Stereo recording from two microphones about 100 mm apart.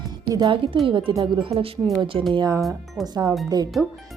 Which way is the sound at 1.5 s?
70° right (ahead or behind).